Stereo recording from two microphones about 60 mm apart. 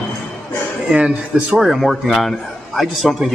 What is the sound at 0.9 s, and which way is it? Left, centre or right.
Speech, centre.